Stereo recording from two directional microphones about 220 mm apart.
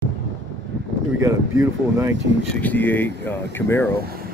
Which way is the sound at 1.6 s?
15° right (ahead or behind).